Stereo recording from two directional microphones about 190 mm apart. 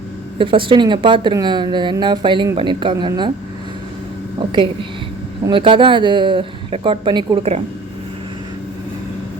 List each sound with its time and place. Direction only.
0.3 s speech: 25° right (ahead or behind)
4.5 s speech: 25° right (ahead or behind)